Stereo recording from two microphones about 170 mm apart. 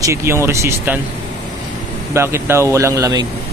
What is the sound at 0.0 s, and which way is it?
Speech, 15° right (ahead or behind).